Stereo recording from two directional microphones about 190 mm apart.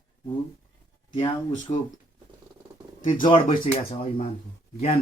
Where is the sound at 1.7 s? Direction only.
30° left (ahead or behind).